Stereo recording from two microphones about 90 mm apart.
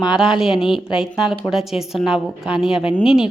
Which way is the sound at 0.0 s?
5° right (ahead or behind).